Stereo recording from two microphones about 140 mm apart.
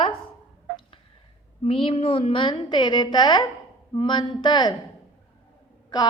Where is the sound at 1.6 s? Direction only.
45° left (ahead or behind).